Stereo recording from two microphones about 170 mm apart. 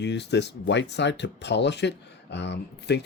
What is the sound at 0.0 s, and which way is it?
Speech, 90° left.